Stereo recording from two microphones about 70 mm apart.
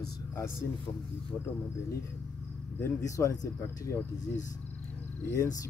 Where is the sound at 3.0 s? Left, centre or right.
Left.